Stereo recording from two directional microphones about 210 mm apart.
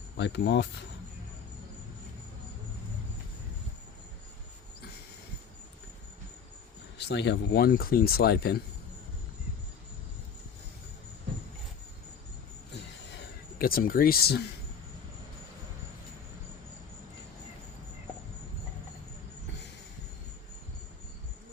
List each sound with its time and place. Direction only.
0.2 s speech: 55° left (ahead or behind)
7.0 s speech: 55° left (ahead or behind)
13.1 s speech: 45° left (ahead or behind)